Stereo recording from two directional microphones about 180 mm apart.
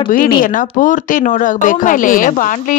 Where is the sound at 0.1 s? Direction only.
50° left (ahead or behind).